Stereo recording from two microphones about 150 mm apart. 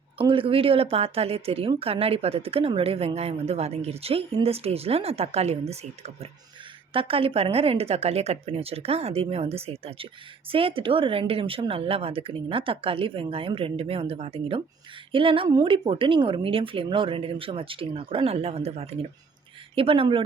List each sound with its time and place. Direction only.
0.2 s speech: 35° right (ahead or behind)